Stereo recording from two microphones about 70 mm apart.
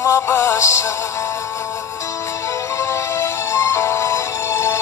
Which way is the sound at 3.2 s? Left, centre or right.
Left.